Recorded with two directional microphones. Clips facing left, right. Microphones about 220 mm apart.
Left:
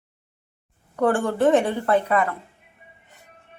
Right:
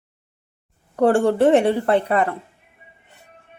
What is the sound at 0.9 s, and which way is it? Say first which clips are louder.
Speech: right 5 dB; 25° right (ahead or behind).